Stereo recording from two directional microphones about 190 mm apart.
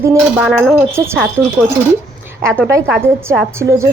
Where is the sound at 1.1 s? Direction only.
5° left (ahead or behind).